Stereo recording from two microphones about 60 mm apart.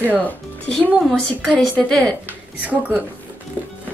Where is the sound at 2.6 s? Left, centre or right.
Right.